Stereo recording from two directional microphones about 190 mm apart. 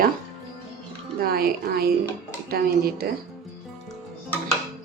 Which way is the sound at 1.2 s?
50° right (ahead or behind).